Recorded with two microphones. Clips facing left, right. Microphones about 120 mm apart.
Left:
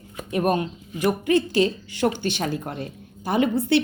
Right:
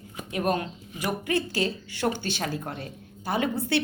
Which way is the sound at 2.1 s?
35° right (ahead or behind).